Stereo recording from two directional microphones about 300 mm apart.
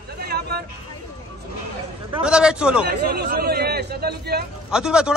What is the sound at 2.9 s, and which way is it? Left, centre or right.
A man's voice, right.